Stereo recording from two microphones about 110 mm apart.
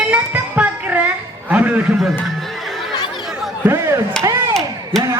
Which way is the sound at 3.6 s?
25° right (ahead or behind).